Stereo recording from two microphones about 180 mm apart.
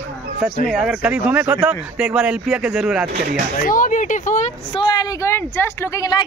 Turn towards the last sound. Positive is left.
turn(degrees=20)  # may be behind; listen again after turning